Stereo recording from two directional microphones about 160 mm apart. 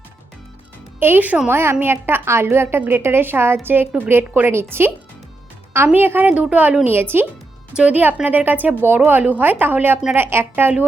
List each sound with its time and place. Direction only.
0.9 s a woman's voice: 10° right (ahead or behind)